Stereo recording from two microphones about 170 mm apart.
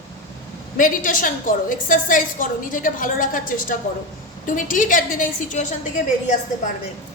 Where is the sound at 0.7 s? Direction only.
50° left (ahead or behind).